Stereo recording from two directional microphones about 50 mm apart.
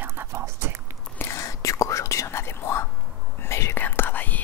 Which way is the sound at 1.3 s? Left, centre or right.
Left.